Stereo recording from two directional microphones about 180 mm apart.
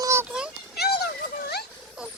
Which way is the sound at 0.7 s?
65° left (ahead or behind).